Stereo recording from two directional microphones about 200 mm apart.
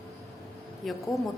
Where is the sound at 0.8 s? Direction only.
Centre (ahead or behind).